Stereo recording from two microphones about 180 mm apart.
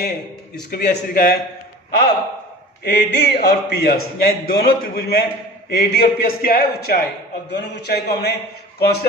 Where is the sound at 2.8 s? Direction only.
70° left (ahead or behind).